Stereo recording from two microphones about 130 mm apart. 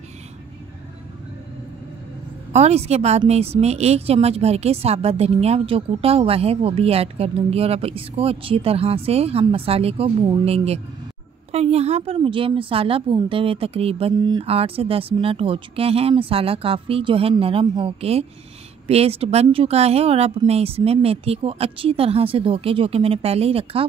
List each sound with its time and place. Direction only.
2.5 s speech: 55° right (ahead or behind)